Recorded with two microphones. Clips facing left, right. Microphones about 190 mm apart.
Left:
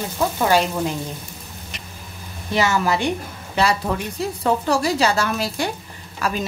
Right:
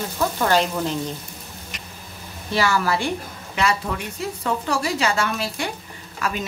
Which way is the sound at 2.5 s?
20° left (ahead or behind).